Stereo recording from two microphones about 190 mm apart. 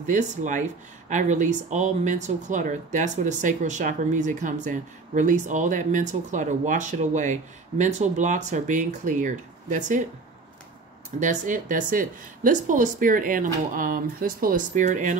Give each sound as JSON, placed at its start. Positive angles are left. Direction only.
{"t": 0.0, "sound": "speech", "side_deg": -40}
{"t": 11.1, "sound": "speech", "side_deg": -40}